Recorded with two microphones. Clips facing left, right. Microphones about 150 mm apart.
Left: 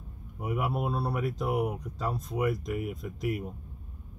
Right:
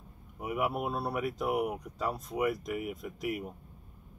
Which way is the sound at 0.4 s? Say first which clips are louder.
Left 1 dB; 5° right (ahead or behind).